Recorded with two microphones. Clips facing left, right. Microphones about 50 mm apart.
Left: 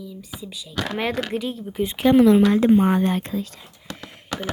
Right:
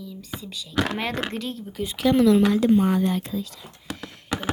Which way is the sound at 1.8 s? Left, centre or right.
Left.